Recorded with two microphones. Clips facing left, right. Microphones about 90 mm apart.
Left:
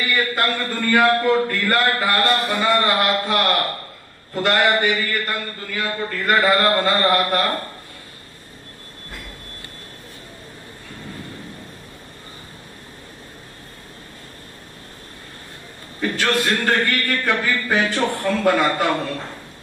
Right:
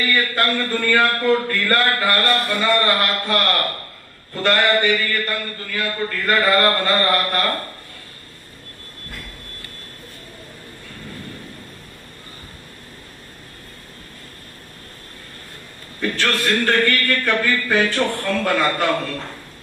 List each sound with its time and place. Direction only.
0.0 s a man's voice: 15° left (ahead or behind)
16.0 s a man's voice: 15° left (ahead or behind)